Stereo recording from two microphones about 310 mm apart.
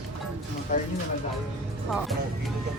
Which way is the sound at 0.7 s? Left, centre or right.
Left.